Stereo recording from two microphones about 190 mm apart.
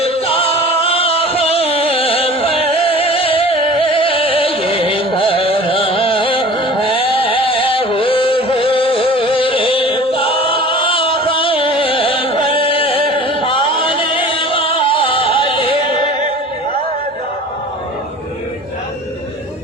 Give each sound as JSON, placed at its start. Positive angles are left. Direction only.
{"t": 0.0, "sound": "music", "side_deg": 30}